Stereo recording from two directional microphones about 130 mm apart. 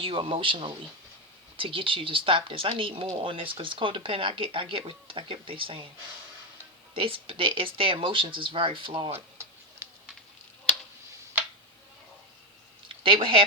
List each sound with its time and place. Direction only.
0.0 s speech: 40° right (ahead or behind)
6.9 s speech: 45° right (ahead or behind)
12.9 s speech: 40° right (ahead or behind)